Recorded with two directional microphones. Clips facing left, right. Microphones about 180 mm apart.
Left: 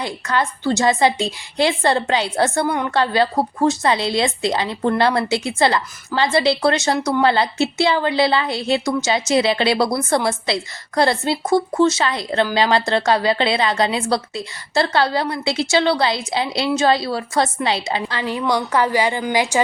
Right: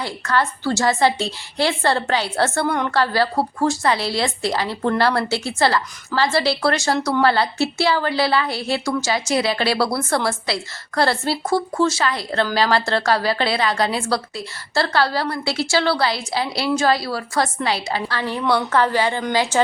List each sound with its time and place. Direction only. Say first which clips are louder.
0.0 s a woman's voice: even; 20° left (ahead or behind)